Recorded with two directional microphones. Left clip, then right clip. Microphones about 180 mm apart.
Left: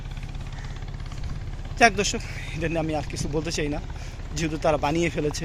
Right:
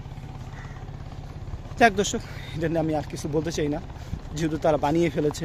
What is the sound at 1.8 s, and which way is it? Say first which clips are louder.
Speech: even; 25° right (ahead or behind).